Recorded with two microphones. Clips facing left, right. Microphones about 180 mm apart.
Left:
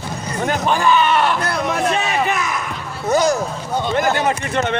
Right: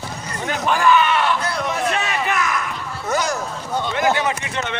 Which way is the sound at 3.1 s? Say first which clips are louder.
Left 6 dB; 35° left (ahead or behind).